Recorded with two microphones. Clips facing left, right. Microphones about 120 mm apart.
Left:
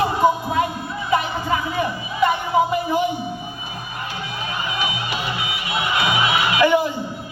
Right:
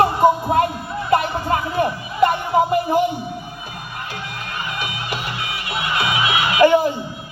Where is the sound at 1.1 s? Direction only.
50° right (ahead or behind).